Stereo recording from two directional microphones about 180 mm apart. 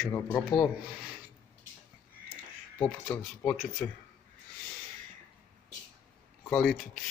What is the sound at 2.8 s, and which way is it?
Speech, 5° left (ahead or behind).